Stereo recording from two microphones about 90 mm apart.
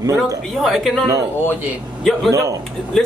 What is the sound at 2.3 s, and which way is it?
Speech, 40° right (ahead or behind).